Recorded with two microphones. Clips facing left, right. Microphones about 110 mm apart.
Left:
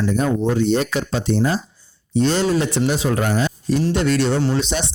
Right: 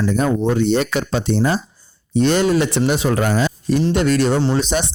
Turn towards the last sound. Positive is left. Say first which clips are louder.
# right 2 dB
turn(degrees=-45)  # may be behind; listen again after turning